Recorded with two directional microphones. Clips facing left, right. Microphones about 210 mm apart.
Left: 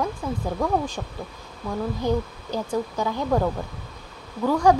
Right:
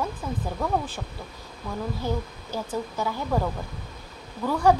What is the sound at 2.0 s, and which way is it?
Speech, 15° left (ahead or behind).